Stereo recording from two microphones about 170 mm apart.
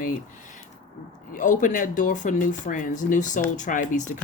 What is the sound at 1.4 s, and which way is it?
Speech, 50° left (ahead or behind).